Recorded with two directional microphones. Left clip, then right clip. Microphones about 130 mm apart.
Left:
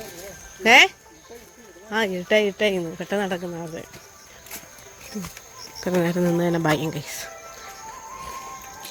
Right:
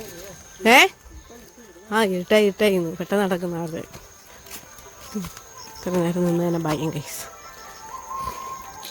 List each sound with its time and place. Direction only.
0.6 s speech: 35° right (ahead or behind)
5.8 s speech: 5° right (ahead or behind)